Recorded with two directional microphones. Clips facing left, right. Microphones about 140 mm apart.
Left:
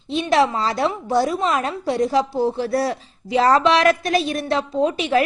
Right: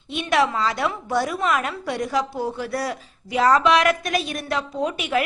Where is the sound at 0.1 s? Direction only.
30° left (ahead or behind).